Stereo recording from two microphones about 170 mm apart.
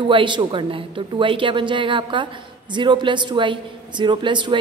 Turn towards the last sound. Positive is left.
turn(degrees=-30)  # may be behind; listen again after turning